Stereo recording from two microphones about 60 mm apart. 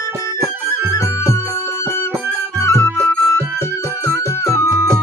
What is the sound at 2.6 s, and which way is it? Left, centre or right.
Music, left.